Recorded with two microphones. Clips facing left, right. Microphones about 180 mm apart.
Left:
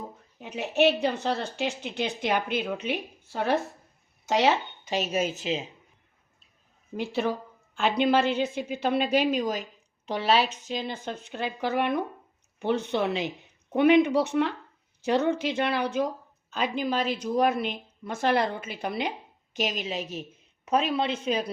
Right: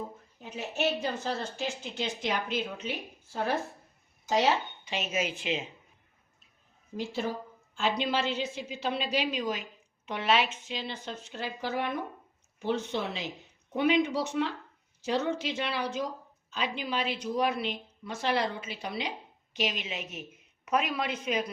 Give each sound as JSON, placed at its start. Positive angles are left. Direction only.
{"t": 0.3, "sound": "a woman's voice", "side_deg": 70}
{"t": 4.9, "sound": "speech", "side_deg": 40}
{"t": 6.9, "sound": "a woman's voice", "side_deg": 65}
{"t": 19.5, "sound": "a woman's voice", "side_deg": 40}